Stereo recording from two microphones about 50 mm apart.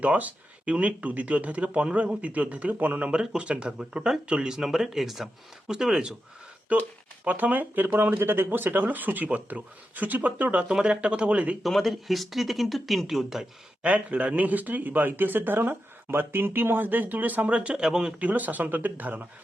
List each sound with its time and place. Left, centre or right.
0.0 s speech: right; by 6.1 s centre
7.3 s speech: right
11.6 s speech: centre
13.8 s speech: right
17.8 s speech: centre
18.2 s speech: right